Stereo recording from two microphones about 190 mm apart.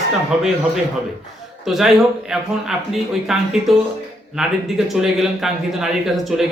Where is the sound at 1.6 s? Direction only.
Centre (ahead or behind).